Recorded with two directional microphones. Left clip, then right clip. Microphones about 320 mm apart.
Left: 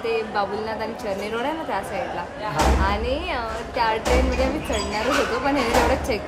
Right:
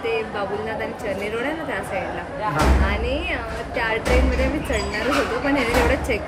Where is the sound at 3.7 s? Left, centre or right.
Centre.